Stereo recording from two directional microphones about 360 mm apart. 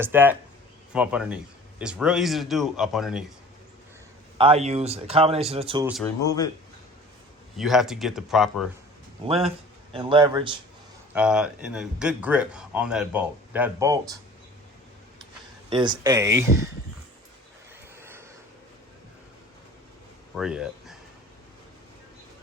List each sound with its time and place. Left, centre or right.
0.0 s a man's voice: centre
4.4 s speech: centre
5.9 s speech: centre
7.5 s a man's voice: centre
9.2 s a man's voice: centre
15.7 s speech: centre
18.0 s a sound: centre
20.3 s speech: centre